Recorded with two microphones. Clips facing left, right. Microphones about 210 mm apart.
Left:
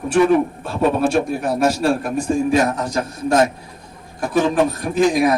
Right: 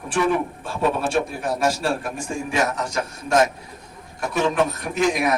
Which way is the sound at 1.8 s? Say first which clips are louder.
Left 7 dB; 40° left (ahead or behind).